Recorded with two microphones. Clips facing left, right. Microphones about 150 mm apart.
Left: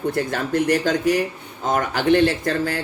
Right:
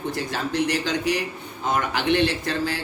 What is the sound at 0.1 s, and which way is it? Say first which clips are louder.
Speech: left 5 dB; 50° left (ahead or behind).